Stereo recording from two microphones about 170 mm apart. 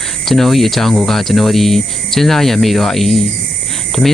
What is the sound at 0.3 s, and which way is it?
Speech, centre (ahead or behind).